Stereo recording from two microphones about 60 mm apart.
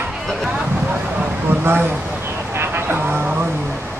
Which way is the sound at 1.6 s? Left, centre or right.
Right.